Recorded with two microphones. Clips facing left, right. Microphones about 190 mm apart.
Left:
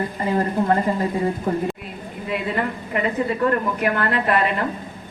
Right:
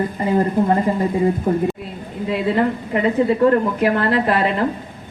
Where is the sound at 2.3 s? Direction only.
25° right (ahead or behind).